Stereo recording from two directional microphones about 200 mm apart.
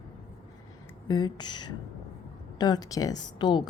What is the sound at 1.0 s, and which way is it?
A woman's voice, 20° left (ahead or behind).